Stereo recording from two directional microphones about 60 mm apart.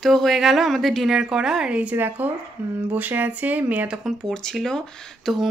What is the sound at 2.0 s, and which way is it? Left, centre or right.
Speech, right.